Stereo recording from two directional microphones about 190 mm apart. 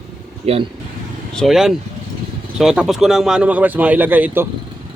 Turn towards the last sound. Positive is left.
turn(degrees=-10)  # may be behind; listen again after turning